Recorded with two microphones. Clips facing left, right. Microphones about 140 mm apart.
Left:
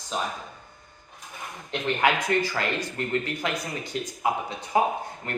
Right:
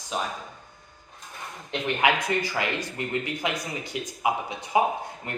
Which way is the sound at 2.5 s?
15° right (ahead or behind).